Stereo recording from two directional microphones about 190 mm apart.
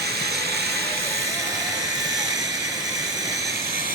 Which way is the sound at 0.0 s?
60° right (ahead or behind).